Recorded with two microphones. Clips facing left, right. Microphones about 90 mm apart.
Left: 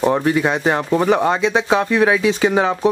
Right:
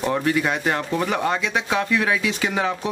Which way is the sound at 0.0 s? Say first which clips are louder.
Left 5 dB; 25° left (ahead or behind).